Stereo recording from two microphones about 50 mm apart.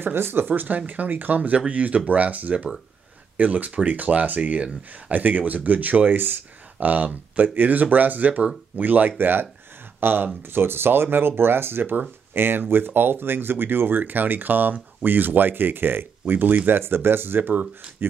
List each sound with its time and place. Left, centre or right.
0.0 s speech: right